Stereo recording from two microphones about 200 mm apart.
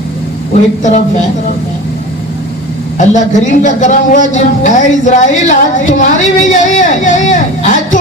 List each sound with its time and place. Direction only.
3.0 s speech: 35° left (ahead or behind)